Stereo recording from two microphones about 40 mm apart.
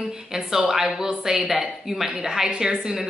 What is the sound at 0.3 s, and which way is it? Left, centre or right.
Speech, centre.